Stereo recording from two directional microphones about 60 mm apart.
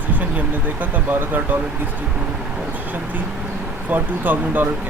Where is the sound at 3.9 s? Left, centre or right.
Right.